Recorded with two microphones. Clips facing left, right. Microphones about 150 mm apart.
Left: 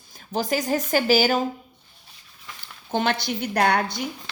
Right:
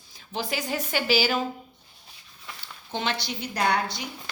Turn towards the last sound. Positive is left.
turn(degrees=55)  # may be behind; listen again after turning